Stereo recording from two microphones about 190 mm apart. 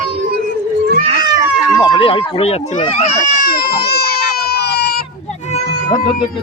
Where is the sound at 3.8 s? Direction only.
55° left (ahead or behind).